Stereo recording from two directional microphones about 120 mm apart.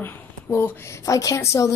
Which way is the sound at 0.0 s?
20° left (ahead or behind).